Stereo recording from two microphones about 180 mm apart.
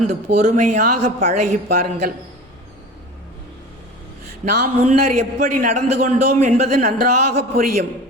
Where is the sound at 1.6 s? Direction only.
60° right (ahead or behind).